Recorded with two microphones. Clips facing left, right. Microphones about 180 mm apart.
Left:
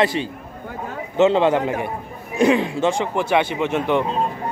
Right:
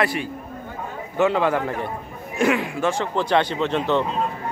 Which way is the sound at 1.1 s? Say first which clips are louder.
Left 4 dB; 25° left (ahead or behind).